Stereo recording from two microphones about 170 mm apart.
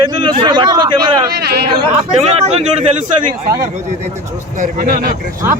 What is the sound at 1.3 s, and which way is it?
Speech, 70° right (ahead or behind).